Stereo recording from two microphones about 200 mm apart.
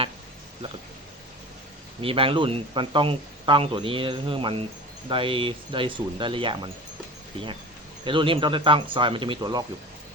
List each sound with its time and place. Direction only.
2.0 s speech: 25° right (ahead or behind)
8.0 s speech: 25° right (ahead or behind)